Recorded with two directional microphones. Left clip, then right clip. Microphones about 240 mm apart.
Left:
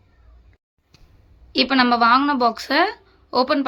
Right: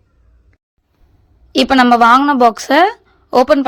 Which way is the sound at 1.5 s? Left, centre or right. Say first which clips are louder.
Right 7 dB; right.